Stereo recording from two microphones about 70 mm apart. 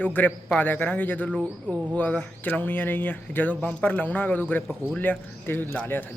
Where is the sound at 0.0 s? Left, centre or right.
Left.